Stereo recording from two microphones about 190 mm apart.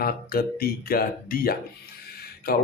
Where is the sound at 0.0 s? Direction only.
50° left (ahead or behind).